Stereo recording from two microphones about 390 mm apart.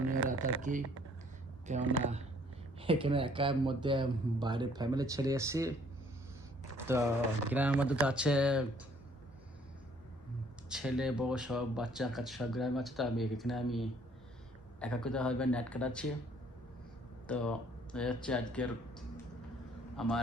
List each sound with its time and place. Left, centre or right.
0.3 s speech: centre
6.9 s speech: centre
10.7 s speech: centre
17.2 s speech: centre